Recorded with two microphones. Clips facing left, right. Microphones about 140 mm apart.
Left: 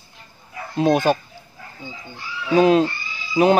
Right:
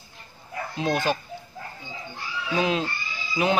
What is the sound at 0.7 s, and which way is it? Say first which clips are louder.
Speech: left 8 dB; 50° left (ahead or behind).